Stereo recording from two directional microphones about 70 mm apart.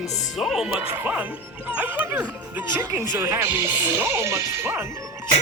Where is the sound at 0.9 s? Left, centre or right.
Right.